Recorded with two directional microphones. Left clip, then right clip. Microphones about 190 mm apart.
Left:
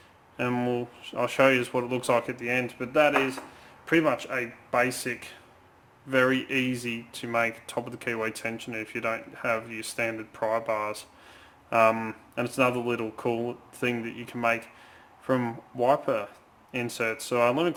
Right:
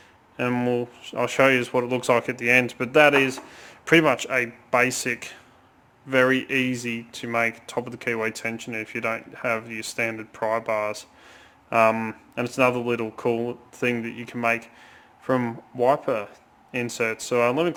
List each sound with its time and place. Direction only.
0.3 s speech: 25° right (ahead or behind)
2.5 s speech: 50° right (ahead or behind)
4.2 s speech: 35° right (ahead or behind)